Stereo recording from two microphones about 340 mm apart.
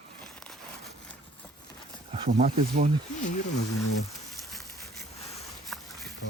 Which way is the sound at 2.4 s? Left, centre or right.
Right.